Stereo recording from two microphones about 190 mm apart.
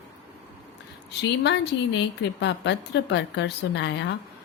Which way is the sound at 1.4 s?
65° left (ahead or behind).